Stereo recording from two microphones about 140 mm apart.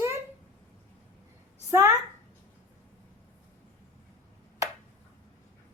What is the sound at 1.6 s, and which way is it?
Speech, 20° right (ahead or behind).